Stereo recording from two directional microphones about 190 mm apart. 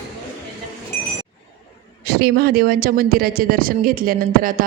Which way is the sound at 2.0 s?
55° right (ahead or behind).